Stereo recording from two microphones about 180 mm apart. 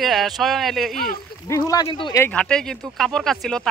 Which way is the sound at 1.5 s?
20° left (ahead or behind).